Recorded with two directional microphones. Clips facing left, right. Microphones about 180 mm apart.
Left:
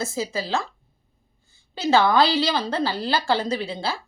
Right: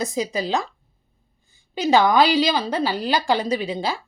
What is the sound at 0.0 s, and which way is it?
Speech, 15° right (ahead or behind).